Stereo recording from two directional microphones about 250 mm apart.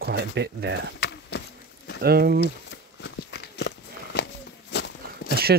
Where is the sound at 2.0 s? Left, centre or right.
Right.